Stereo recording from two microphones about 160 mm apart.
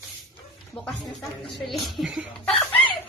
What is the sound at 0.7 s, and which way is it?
Speech, 20° left (ahead or behind).